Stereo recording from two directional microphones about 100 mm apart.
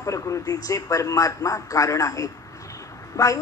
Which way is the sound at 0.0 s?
30° left (ahead or behind).